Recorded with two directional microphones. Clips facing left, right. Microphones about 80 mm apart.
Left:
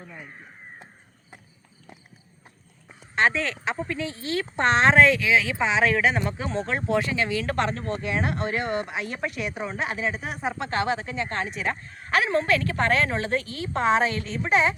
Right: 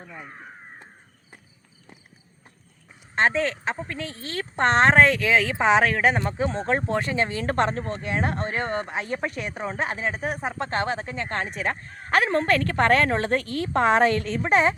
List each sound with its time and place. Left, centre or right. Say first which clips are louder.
3.2 s a woman's voice: right 1 dB; right